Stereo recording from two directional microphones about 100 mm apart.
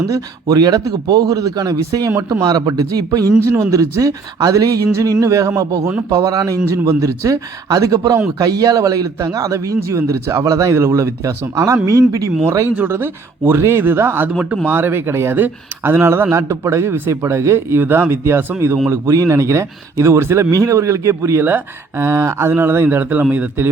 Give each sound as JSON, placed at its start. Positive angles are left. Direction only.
{"t": 0.0, "sound": "a man's voice", "side_deg": -35}
{"t": 14.3, "sound": "speech", "side_deg": -10}